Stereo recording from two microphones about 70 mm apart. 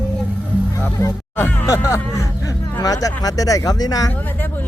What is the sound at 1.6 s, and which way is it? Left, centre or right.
Speech, left.